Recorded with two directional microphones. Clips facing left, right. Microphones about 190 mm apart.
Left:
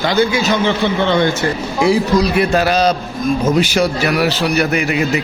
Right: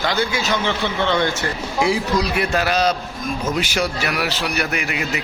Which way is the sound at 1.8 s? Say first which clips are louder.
Left 8 dB; 35° left (ahead or behind).